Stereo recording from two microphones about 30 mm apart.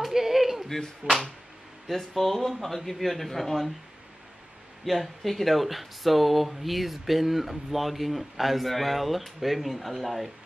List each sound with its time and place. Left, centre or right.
0.1 s a sound: centre
1.0 s speech: right
1.9 s speech: centre
4.8 s speech: centre